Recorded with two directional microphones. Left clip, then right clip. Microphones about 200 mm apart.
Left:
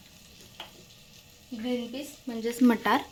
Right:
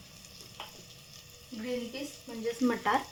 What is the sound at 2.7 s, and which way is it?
Speech, 40° left (ahead or behind).